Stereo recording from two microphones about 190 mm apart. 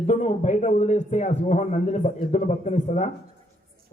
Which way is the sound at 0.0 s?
35° left (ahead or behind).